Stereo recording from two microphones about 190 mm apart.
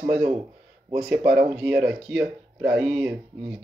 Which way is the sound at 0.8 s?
10° right (ahead or behind).